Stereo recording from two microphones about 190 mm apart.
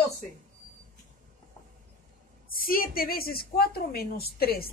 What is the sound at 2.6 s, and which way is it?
A woman's voice, 50° left (ahead or behind).